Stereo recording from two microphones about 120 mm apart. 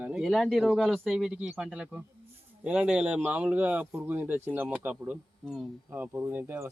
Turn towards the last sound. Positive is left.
turn(degrees=-15)  # may be behind; listen again after turning